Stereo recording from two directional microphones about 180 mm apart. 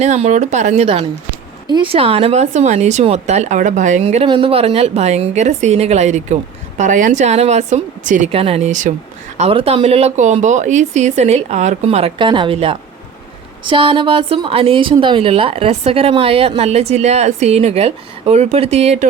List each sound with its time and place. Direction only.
0.0 s speech: 40° right (ahead or behind)